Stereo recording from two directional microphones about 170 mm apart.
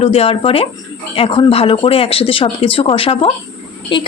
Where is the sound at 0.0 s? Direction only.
35° left (ahead or behind).